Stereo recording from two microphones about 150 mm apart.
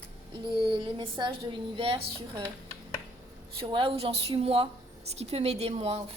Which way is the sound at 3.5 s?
35° right (ahead or behind).